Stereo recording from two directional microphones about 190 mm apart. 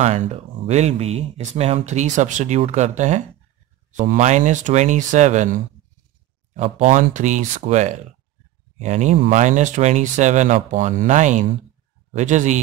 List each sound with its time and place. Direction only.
0.0 s speech: 35° right (ahead or behind)